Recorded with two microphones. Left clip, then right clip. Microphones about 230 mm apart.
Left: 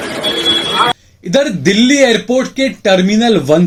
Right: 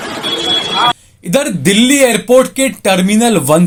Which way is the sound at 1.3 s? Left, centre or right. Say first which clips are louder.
Even; right.